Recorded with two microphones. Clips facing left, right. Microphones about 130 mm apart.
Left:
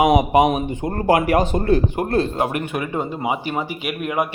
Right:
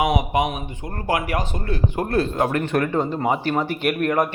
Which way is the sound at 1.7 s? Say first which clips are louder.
Left 2 dB; 20° left (ahead or behind).